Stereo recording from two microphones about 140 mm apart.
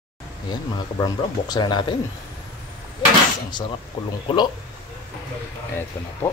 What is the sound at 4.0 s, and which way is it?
Speech, 40° left (ahead or behind).